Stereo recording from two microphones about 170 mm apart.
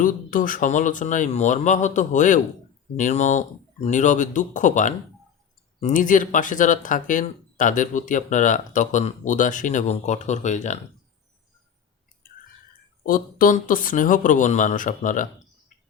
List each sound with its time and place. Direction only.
0.0 s speech: 55° left (ahead or behind)
13.0 s speech: 55° left (ahead or behind)